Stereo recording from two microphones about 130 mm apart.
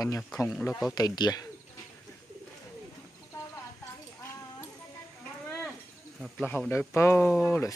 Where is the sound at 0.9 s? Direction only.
30° left (ahead or behind).